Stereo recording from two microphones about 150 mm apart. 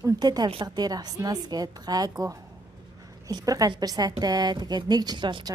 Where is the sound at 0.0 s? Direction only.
25° right (ahead or behind).